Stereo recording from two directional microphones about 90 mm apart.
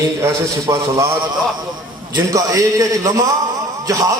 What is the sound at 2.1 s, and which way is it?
A man's voice, 40° right (ahead or behind).